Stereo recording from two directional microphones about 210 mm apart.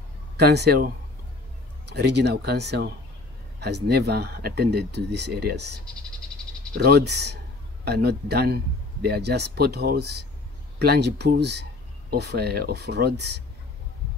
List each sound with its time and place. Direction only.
0.4 s speech: 50° right (ahead or behind)
6.8 s speech: 50° right (ahead or behind)